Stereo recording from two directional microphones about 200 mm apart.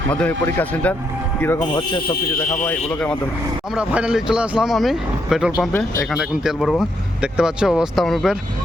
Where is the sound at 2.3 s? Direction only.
10° left (ahead or behind).